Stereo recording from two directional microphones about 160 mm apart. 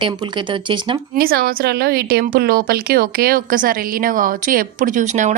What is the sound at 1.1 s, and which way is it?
Speech, 70° right (ahead or behind).